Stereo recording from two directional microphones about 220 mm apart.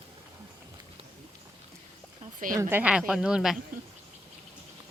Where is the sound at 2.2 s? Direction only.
35° right (ahead or behind).